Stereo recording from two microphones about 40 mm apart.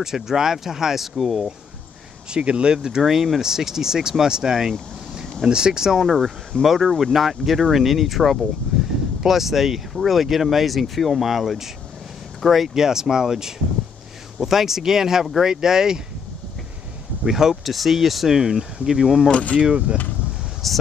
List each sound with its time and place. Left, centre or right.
0.0 s speech: centre
2.3 s speech: right
5.9 s speech: centre
17.3 s speech: centre
19.6 s speech: right
20.6 s speech: centre